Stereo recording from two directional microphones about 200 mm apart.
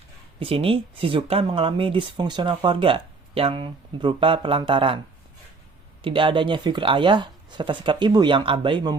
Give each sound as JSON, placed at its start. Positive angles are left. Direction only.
{"t": 0.3, "sound": "speech", "side_deg": -25}
{"t": 6.0, "sound": "speech", "side_deg": -25}